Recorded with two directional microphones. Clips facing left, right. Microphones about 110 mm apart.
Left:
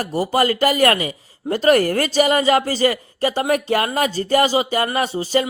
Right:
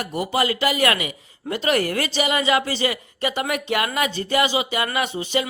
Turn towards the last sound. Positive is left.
turn(degrees=35)  # may be behind; listen again after turning